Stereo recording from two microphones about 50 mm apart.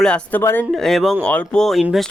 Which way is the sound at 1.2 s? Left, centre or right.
Left.